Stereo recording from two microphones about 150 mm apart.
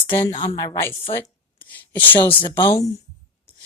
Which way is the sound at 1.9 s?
10° left (ahead or behind).